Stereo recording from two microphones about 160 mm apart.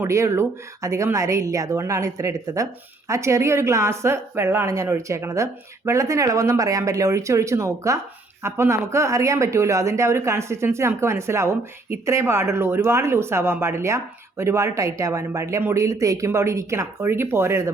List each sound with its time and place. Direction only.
0.0 s speech: 20° right (ahead or behind)